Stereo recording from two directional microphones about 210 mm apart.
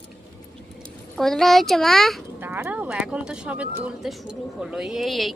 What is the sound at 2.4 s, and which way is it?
Speech, 10° right (ahead or behind).